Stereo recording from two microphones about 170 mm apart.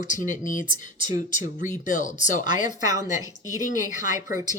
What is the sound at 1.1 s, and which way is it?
Speech, 50° left (ahead or behind).